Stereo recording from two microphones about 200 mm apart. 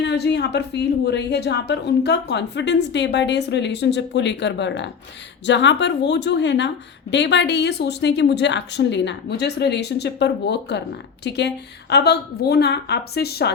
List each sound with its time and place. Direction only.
0.0 s a woman's voice: 60° left (ahead or behind)